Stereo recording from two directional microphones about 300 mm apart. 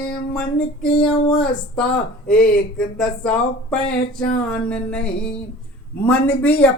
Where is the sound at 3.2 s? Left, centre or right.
Centre.